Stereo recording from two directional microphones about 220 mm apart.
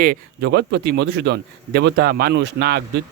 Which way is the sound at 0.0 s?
45° right (ahead or behind).